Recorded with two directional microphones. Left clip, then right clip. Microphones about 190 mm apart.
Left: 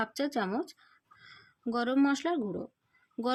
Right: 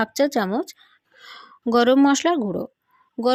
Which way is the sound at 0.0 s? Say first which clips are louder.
Right 11 dB; 40° right (ahead or behind).